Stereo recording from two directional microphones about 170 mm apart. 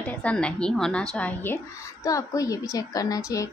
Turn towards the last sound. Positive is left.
turn(degrees=20)  # may be behind; listen again after turning